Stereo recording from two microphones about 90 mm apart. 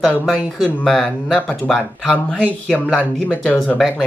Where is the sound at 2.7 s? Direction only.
15° left (ahead or behind).